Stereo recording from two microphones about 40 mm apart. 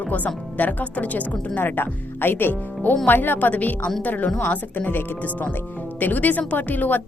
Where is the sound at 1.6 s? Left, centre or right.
Left.